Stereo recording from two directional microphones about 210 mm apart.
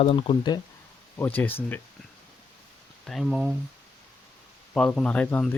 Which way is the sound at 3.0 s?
Centre (ahead or behind).